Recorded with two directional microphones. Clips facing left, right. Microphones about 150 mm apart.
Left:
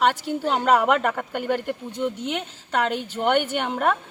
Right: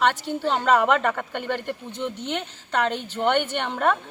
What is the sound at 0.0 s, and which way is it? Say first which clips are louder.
A woman's voice: left 1 dB; 10° left (ahead or behind).